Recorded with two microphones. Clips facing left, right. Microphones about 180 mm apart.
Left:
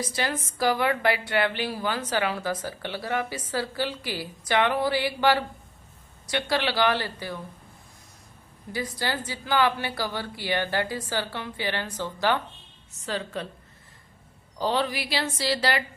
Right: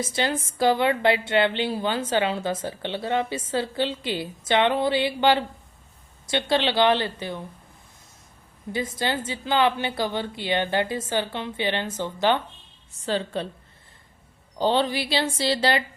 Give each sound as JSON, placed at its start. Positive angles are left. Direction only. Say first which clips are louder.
{"t": 0.0, "sound": "a woman's voice", "louder": "right 3 dB", "side_deg": -25}
{"t": 8.7, "sound": "a woman's voice", "louder": "right 3 dB", "side_deg": -25}
{"t": 14.6, "sound": "a woman's voice", "louder": "right 4 dB", "side_deg": -25}